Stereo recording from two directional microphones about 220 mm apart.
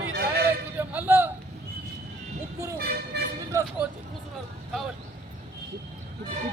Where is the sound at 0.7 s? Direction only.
10° right (ahead or behind).